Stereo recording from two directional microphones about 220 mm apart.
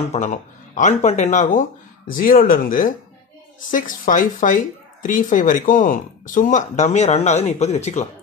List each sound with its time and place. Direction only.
0.1 s speech: 35° left (ahead or behind)